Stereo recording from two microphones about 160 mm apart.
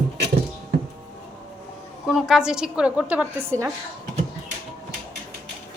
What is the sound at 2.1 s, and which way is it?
A woman's voice, 5° right (ahead or behind).